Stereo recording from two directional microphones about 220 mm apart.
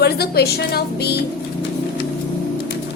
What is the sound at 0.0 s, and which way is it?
A woman's voice, 45° left (ahead or behind).